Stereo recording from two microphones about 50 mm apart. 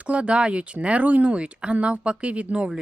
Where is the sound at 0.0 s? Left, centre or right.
Right.